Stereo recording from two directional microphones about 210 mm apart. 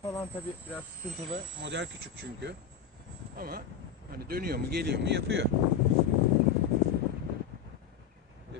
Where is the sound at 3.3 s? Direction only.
45° right (ahead or behind).